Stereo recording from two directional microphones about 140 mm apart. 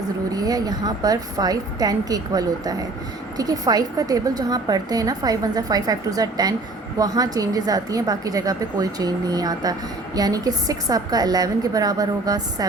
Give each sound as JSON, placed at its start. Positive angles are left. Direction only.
{"t": 0.3, "sound": "a woman's voice", "side_deg": -25}